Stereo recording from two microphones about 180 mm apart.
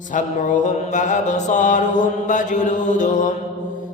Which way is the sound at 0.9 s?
45° left (ahead or behind).